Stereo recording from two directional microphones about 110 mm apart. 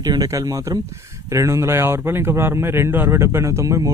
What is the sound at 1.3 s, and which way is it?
Speech, 30° right (ahead or behind).